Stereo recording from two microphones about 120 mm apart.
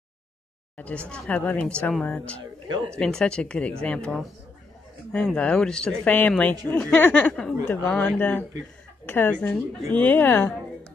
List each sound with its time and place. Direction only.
0.7 s speech: 10° left (ahead or behind)